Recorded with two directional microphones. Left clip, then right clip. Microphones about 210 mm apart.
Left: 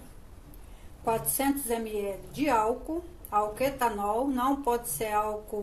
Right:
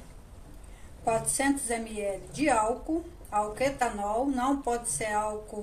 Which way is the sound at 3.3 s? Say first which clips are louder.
Left 1 dB; 30° left (ahead or behind).